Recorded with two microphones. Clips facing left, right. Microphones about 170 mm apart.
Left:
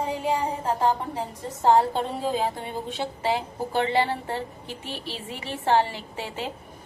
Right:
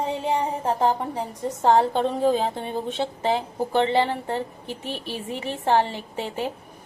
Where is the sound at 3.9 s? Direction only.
20° right (ahead or behind).